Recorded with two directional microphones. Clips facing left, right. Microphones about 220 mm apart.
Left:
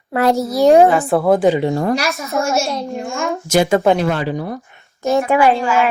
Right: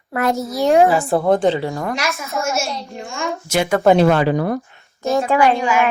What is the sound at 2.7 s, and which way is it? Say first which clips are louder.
Speech: left 7 dB; 55° left (ahead or behind).